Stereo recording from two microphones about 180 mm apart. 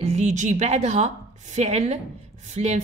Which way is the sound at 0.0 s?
35° right (ahead or behind).